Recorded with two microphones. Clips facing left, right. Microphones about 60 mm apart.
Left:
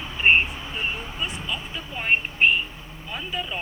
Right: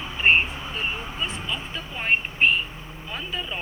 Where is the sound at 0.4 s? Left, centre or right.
Right.